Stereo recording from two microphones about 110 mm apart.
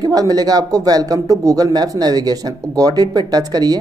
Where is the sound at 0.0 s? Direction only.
35° right (ahead or behind).